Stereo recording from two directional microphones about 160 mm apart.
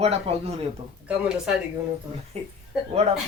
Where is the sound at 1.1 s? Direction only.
5° right (ahead or behind).